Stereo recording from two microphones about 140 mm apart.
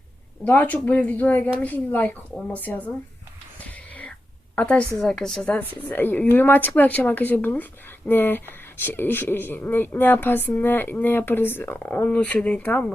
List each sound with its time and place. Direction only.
0.4 s a woman's voice: 10° left (ahead or behind)
3.6 s whispering: 10° left (ahead or behind)
4.5 s a woman's voice: 10° left (ahead or behind)